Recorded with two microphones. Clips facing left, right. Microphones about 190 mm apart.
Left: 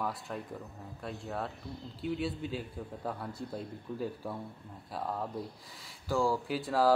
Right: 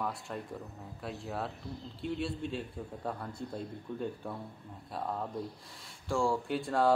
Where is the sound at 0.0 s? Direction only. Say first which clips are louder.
Even; centre (ahead or behind).